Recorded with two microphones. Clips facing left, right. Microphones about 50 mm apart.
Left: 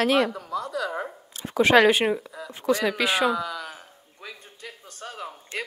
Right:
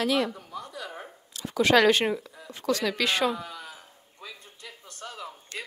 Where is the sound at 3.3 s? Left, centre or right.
Left.